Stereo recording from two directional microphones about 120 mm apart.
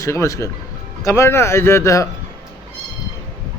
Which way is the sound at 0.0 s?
25° left (ahead or behind).